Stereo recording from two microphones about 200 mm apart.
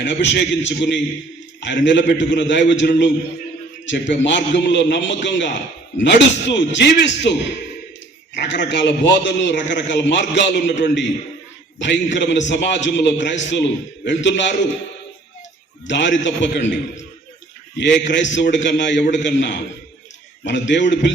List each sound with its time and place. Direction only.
0.0 s a man's voice: 60° left (ahead or behind)
15.9 s a man's voice: 65° left (ahead or behind)
18.1 s a man's voice: 65° left (ahead or behind)